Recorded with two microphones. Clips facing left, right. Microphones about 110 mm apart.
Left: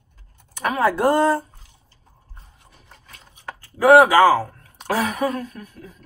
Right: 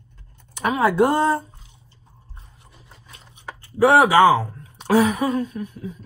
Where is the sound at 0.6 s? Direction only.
15° right (ahead or behind).